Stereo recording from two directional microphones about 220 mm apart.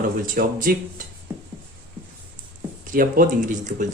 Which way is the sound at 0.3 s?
40° right (ahead or behind).